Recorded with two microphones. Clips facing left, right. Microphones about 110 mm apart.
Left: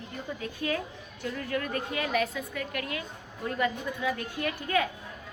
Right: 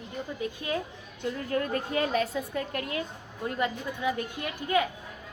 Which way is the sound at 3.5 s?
25° right (ahead or behind).